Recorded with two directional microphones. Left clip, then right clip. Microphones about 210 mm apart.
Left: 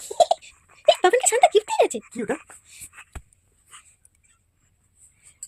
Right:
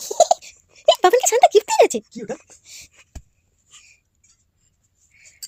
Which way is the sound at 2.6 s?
20° right (ahead or behind).